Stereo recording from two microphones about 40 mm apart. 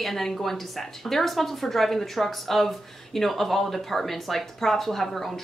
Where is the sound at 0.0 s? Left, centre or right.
Centre.